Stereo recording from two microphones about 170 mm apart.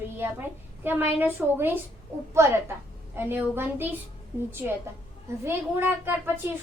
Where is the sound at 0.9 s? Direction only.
10° right (ahead or behind).